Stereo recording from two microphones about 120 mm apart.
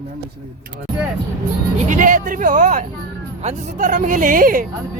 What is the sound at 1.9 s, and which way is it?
Speech, 90° right.